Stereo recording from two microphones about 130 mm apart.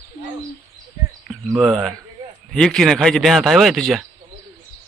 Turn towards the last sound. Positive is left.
turn(degrees=0)  # may be behind; listen again after turning